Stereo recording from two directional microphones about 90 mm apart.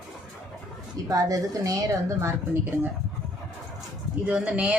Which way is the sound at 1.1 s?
40° right (ahead or behind).